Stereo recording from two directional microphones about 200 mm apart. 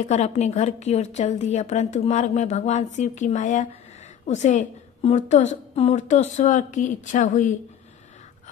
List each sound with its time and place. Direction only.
0.1 s a woman's voice: 35° left (ahead or behind)